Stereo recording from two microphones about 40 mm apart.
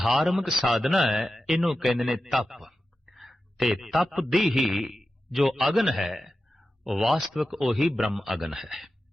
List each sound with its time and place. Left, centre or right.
0.0 s a man's voice: centre
2.5 s a sound: centre
4.1 s a man's voice: centre